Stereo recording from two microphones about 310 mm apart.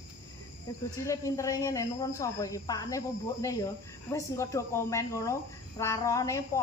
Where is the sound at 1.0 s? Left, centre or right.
Centre.